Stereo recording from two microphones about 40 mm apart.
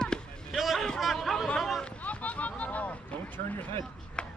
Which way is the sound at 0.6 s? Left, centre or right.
Centre.